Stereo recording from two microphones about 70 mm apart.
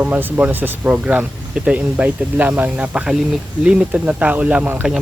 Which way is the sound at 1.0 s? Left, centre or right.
Centre.